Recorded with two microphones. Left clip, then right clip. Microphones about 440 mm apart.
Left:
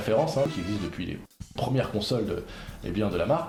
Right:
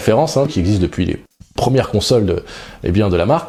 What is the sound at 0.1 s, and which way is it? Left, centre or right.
Speech, right.